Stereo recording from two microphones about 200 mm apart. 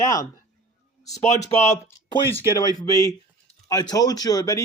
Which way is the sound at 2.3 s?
15° left (ahead or behind).